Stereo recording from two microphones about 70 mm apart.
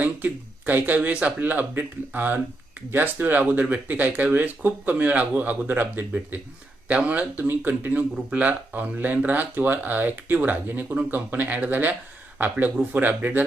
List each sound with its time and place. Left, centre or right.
0.0 s speech: right
7.4 s speech: right